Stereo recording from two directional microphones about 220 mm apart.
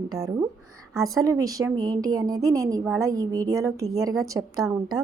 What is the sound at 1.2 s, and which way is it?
A woman's voice, 15° right (ahead or behind).